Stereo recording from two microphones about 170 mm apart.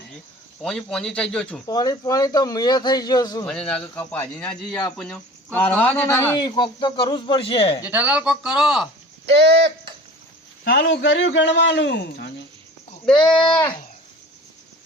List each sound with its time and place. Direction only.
0.6 s speech: 5° left (ahead or behind)
1.6 s speech: 20° left (ahead or behind)
3.4 s speech: 5° left (ahead or behind)
6.4 s speech: 25° left (ahead or behind)
7.9 s speech: 10° right (ahead or behind)
9.3 s speech: 80° right
10.6 s a man's voice: 85° left